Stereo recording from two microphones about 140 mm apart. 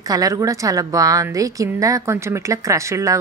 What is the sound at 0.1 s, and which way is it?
A woman's voice, 25° right (ahead or behind).